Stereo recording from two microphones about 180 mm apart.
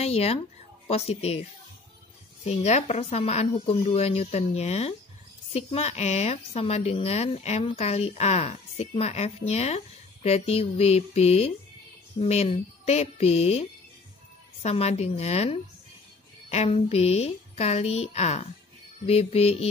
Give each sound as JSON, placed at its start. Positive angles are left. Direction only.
{"t": 0.0, "sound": "a sound", "side_deg": 35}
{"t": 0.8, "sound": "a woman's voice", "side_deg": 35}
{"t": 2.4, "sound": "a woman's voice", "side_deg": 40}